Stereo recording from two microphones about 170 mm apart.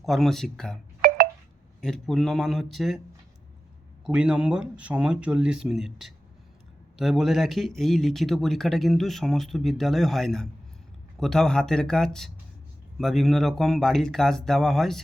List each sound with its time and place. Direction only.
0.0 s speech: centre (ahead or behind)
1.0 s telephone dialing: 60° right (ahead or behind)
1.8 s speech: centre (ahead or behind)
4.0 s speech: 5° right (ahead or behind)